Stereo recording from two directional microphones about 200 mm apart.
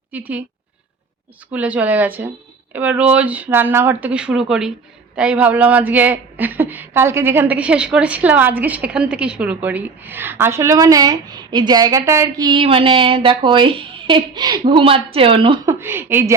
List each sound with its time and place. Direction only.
0.1 s a woman's voice: 10° right (ahead or behind)
1.5 s a woman's voice: 5° right (ahead or behind); by 15.7 s 25° right (ahead or behind)
15.8 s a woman's voice: 10° right (ahead or behind)